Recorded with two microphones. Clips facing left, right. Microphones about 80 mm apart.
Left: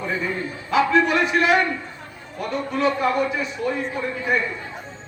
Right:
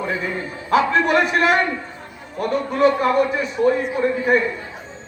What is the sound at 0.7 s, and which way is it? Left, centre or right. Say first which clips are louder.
Speech: right 2 dB; right.